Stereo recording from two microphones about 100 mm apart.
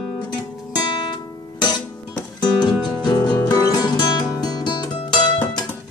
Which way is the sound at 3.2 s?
35° left (ahead or behind).